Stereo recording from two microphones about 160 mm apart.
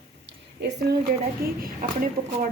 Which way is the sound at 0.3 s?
90° right.